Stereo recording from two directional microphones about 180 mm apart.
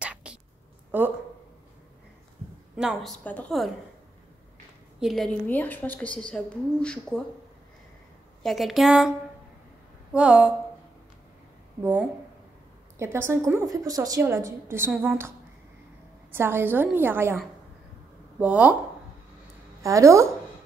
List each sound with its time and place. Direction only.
0.0 s a sound: 5° right (ahead or behind)
2.7 s a woman's voice: 5° right (ahead or behind)
5.0 s a woman's voice: centre (ahead or behind)
8.4 s a woman's voice: centre (ahead or behind)
10.1 s a woman's voice: 5° right (ahead or behind)
11.8 s a woman's voice: 10° right (ahead or behind)
18.4 s a woman's voice: 5° right (ahead or behind)
19.8 s a woman's voice: 15° right (ahead or behind)